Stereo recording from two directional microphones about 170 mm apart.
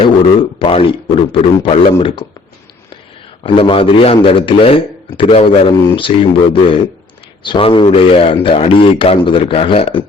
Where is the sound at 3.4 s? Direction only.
30° left (ahead or behind).